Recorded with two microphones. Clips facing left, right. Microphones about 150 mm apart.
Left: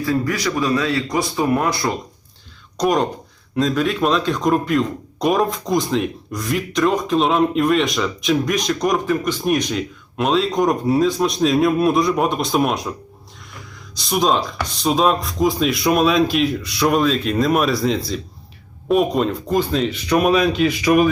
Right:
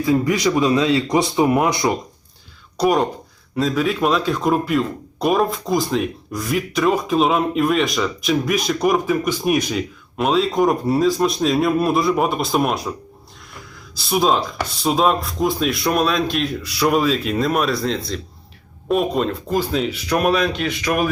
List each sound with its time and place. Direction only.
0.0 s speech: 20° right (ahead or behind)
2.7 s speech: 5° right (ahead or behind)